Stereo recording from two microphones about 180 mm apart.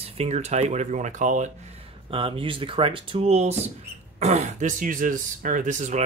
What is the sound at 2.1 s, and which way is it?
Speech, 30° right (ahead or behind).